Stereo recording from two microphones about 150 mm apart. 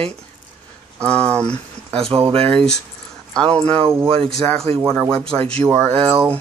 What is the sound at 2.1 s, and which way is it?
Speech, 40° right (ahead or behind).